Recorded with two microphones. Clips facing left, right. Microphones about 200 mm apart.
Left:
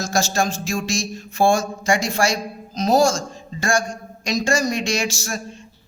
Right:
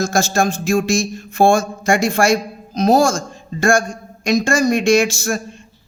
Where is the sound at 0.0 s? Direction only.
55° right (ahead or behind).